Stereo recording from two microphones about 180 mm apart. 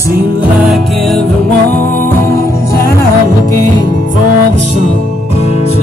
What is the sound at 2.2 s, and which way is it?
Music, 15° left (ahead or behind).